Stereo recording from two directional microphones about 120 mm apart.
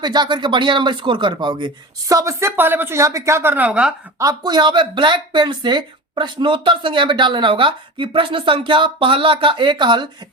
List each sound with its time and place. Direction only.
0.0 s speech: 35° right (ahead or behind); by 3.9 s 10° right (ahead or behind)
4.2 s speech: 30° right (ahead or behind)